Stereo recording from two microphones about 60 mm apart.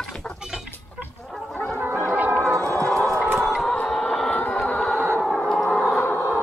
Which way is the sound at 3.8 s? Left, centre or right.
Centre.